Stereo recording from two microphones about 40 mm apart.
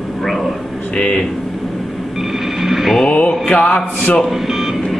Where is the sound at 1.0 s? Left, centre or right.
Left.